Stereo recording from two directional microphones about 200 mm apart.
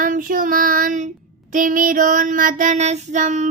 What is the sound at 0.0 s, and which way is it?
Child singing, 45° right (ahead or behind).